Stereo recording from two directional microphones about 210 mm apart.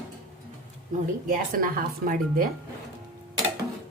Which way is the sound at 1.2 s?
40° right (ahead or behind).